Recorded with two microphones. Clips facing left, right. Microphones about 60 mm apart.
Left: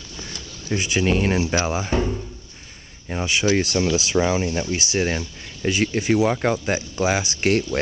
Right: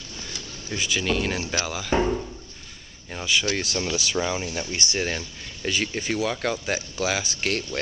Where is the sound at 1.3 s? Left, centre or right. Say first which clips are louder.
Left 7 dB; centre.